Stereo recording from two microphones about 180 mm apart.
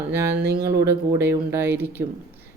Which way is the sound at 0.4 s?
65° right (ahead or behind).